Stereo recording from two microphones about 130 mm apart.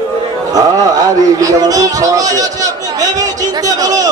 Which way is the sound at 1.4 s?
25° right (ahead or behind).